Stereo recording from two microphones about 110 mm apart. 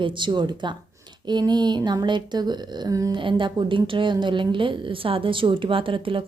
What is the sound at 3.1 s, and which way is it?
A woman's voice, 50° right (ahead or behind).